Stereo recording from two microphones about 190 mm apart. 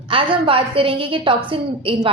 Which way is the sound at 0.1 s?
30° right (ahead or behind).